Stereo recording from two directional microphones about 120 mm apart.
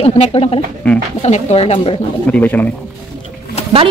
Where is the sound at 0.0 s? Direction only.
55° left (ahead or behind).